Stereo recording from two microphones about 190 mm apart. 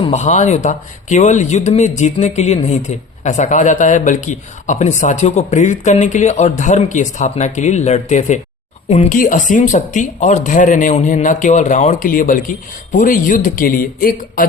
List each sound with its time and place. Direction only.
0.1 s speech: 35° left (ahead or behind)